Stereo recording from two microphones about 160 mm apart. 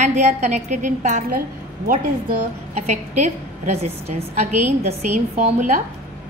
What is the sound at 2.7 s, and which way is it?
A woman's voice, 45° right (ahead or behind).